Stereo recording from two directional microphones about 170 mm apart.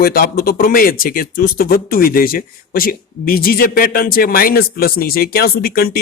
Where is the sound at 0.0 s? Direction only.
60° left (ahead or behind).